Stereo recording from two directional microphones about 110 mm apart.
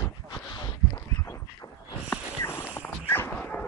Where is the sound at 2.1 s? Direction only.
20° left (ahead or behind).